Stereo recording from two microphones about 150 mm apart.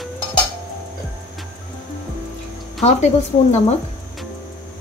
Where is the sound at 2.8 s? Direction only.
50° left (ahead or behind).